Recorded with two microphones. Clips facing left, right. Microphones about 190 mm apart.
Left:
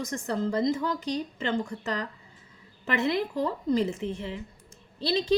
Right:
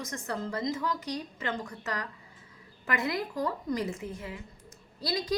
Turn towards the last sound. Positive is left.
turn(degrees=25)  # may be behind; listen again after turning